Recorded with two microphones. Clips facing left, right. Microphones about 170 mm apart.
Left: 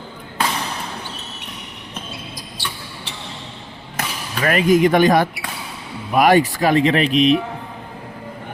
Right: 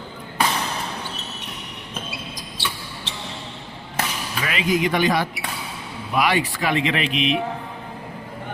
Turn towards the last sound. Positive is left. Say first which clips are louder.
# left 7 dB
turn(degrees=40)  # may be behind; listen again after turning